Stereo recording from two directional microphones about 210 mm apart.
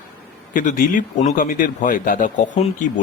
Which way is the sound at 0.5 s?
40° left (ahead or behind).